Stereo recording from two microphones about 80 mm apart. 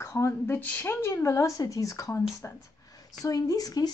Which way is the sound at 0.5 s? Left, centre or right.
Left.